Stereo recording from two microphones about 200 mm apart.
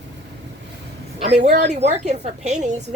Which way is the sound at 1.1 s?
30° right (ahead or behind).